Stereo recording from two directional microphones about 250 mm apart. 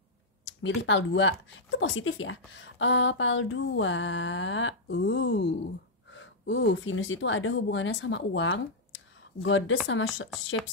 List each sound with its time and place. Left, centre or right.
0.5 s speech: left